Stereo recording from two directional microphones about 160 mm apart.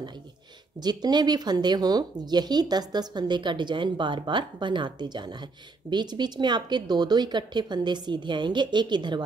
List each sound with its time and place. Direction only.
0.7 s speech: 25° right (ahead or behind)